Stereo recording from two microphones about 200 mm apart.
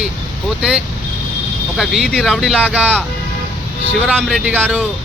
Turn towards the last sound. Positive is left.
turn(degrees=-10)  # may be behind; listen again after turning